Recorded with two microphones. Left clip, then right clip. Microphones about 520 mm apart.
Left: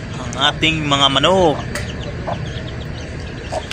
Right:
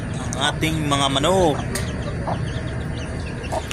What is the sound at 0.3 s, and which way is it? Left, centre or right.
A man's voice, right.